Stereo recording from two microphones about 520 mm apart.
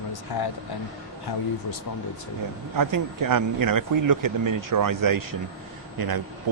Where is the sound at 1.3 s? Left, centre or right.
Left.